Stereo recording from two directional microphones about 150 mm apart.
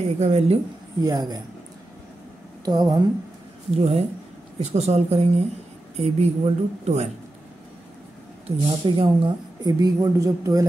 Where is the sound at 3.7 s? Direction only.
40° right (ahead or behind).